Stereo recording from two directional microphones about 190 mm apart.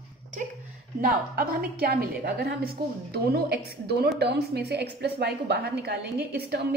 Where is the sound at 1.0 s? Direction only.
45° right (ahead or behind).